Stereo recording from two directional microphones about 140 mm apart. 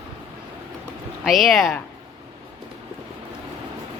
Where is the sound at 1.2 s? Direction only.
Centre (ahead or behind).